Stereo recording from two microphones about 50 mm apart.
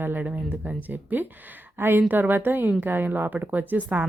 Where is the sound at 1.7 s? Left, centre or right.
Right.